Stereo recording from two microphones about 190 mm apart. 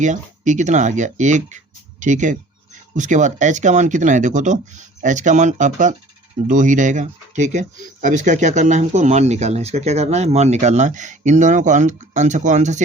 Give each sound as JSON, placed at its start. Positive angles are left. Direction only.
{"t": 0.0, "sound": "speech", "side_deg": -40}